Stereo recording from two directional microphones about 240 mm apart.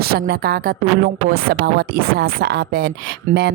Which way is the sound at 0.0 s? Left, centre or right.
Right.